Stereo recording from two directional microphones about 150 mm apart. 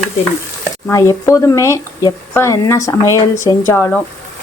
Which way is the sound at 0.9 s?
20° left (ahead or behind).